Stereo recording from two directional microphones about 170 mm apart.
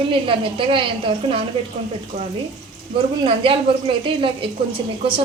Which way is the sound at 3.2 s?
30° right (ahead or behind).